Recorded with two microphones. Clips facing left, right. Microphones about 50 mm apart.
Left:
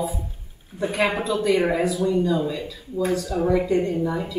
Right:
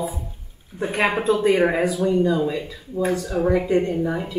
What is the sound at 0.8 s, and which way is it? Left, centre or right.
Speech, right.